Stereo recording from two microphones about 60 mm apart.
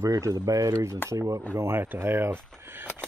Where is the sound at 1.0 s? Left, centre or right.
Right.